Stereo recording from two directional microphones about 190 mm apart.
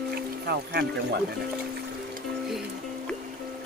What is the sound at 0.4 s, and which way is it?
Speech, 60° right (ahead or behind).